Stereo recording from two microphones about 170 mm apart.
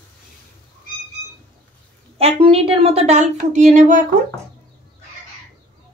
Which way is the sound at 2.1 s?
35° right (ahead or behind).